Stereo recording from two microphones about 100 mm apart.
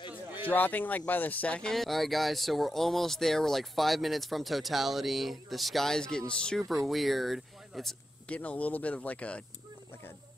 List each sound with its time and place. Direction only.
0.5 s speech: 15° left (ahead or behind); by 7.9 s centre (ahead or behind)
8.3 s speech: 15° left (ahead or behind)